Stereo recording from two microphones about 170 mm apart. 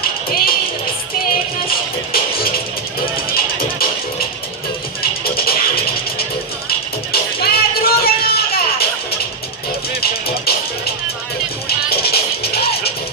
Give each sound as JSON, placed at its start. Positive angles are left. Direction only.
{"t": 0.0, "sound": "music", "side_deg": 60}
{"t": 2.1, "sound": "music", "side_deg": 60}
{"t": 5.2, "sound": "music", "side_deg": 65}
{"t": 9.9, "sound": "music", "side_deg": 65}